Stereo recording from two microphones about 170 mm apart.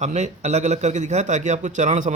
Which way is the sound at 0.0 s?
40° right (ahead or behind).